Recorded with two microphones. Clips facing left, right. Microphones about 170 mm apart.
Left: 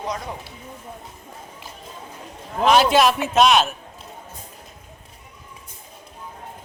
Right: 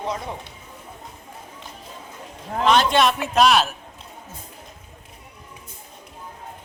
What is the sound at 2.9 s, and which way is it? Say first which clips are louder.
Speech: left 2 dB; centre (ahead or behind).